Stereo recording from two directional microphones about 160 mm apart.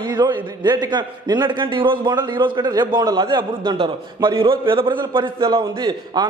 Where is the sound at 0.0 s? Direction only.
25° right (ahead or behind).